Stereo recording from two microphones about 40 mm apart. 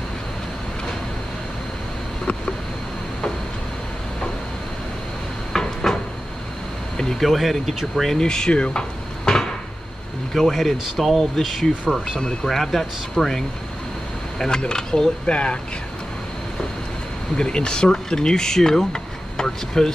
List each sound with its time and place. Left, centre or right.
5.5 s a sound: centre
7.2 s speech: centre
8.2 s speech: centre
10.3 s speech: centre
14.6 s speech: centre
17.4 s speech: left